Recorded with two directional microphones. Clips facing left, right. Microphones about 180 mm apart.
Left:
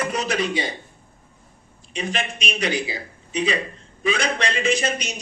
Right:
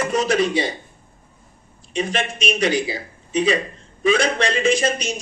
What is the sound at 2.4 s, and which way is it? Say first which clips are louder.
A man's voice: right 6 dB; 45° right (ahead or behind).